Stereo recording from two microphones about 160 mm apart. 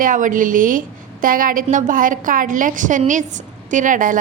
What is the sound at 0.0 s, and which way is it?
A woman's voice, 55° right (ahead or behind).